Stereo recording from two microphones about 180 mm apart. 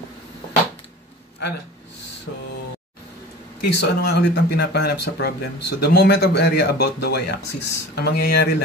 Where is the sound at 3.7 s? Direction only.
65° left (ahead or behind).